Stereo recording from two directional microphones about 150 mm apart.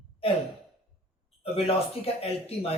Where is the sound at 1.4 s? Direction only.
40° left (ahead or behind).